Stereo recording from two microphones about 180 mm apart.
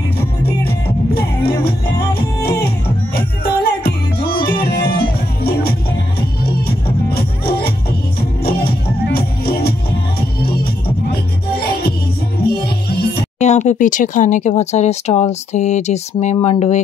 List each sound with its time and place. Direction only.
0.7 s music: 60° left (ahead or behind)
13.4 s speech: 40° left (ahead or behind)